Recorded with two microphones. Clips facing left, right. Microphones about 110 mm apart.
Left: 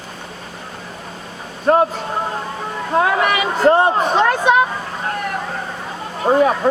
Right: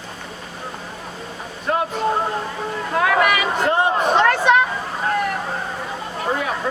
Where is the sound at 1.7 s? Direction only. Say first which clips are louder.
Left 8 dB; 45° left (ahead or behind).